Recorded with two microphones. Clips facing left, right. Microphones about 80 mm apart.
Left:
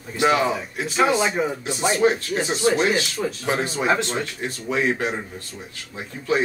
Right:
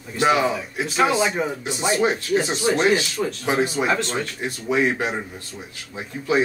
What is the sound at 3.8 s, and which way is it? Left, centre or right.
Speech, centre.